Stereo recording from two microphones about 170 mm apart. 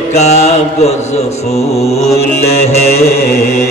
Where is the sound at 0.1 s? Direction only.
40° left (ahead or behind).